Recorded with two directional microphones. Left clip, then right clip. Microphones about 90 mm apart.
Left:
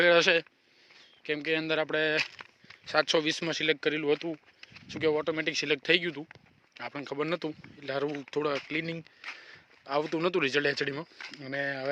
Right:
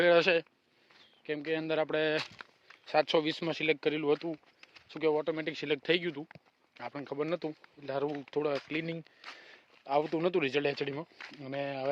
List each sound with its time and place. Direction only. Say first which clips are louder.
0.0 s speech: left 2 dB; centre (ahead or behind)
1.2 s speech: left 4 dB; 15° left (ahead or behind)
1.6 s speech: left 2 dB; centre (ahead or behind)
2.0 s speech: left 3 dB; 10° right (ahead or behind)
4.9 s speech: left 2 dB; 15° left (ahead or behind)
5.6 s speech: left 3 dB; 10° left (ahead or behind)
5.9 s speech: left 4 dB; centre (ahead or behind)
7.2 s speech: left 2 dB; 35° left (ahead or behind)
7.8 s speech: left 2 dB; 15° left (ahead or behind)
8.7 s speech: left 3 dB; centre (ahead or behind)